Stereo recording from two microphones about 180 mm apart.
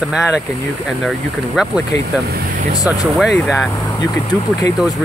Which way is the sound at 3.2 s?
Centre (ahead or behind).